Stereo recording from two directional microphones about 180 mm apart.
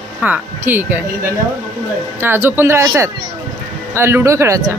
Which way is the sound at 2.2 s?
10° right (ahead or behind).